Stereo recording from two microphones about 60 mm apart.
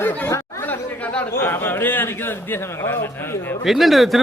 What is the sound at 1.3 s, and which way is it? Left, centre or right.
A man's voice, left.